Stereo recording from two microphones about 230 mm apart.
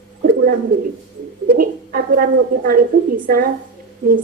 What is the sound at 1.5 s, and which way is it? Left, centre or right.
Speech, right.